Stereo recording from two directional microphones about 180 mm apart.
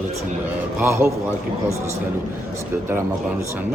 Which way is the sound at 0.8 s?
15° right (ahead or behind).